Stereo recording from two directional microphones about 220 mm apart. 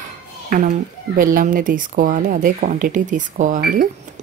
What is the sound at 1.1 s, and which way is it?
Speech, 40° right (ahead or behind).